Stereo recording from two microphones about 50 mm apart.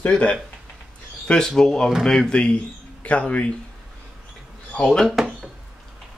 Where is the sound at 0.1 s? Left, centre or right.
Centre.